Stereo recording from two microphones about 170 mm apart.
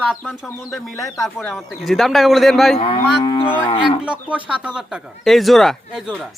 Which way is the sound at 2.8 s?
25° left (ahead or behind).